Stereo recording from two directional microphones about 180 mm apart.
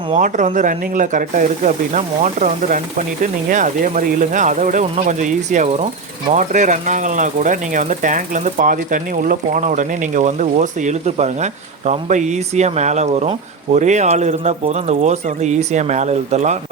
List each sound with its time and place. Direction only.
0.1 s speech: 45° right (ahead or behind)